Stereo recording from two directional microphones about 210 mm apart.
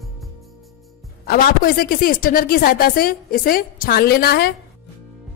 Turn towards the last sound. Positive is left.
turn(degrees=50)  # may be behind; listen again after turning